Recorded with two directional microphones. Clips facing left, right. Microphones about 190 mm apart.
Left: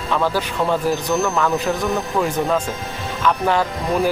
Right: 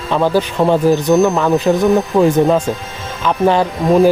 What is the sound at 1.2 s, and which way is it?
Speech, 35° right (ahead or behind).